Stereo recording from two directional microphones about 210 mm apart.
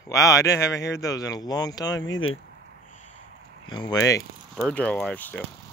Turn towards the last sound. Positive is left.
turn(degrees=10)  # may be behind; listen again after turning